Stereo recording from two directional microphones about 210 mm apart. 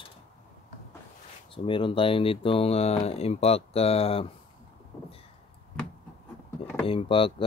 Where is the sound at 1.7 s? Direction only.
25° left (ahead or behind).